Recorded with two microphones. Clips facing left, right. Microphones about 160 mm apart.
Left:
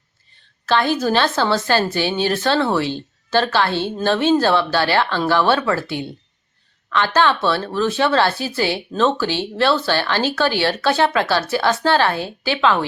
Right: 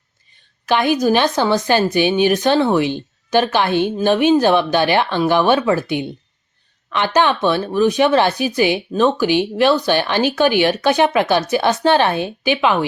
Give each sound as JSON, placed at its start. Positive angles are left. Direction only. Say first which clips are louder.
{"t": 0.6, "sound": "speech", "louder": "right 2 dB", "side_deg": -15}